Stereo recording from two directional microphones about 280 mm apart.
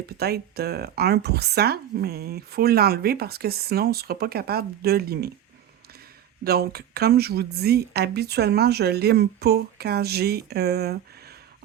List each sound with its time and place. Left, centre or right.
0.2 s speech: right
6.4 s speech: right